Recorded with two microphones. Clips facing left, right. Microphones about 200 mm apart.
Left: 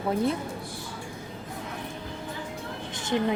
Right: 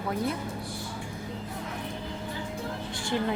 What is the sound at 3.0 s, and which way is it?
Speech, 20° left (ahead or behind).